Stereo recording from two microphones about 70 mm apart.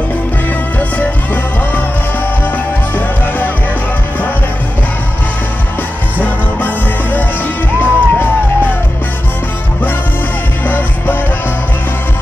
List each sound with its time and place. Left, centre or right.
0.7 s music: left
6.2 s music: left